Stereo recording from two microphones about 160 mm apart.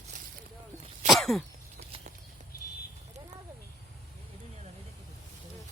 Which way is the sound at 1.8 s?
45° right (ahead or behind).